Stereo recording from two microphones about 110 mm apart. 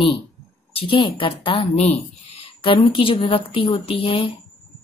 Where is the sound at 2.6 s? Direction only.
55° left (ahead or behind).